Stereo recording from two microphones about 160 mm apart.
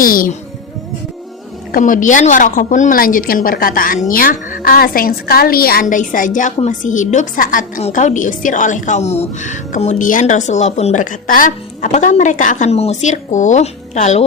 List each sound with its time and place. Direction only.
0.0 s a woman's voice: 60° left (ahead or behind)
1.7 s a woman's voice: 55° left (ahead or behind)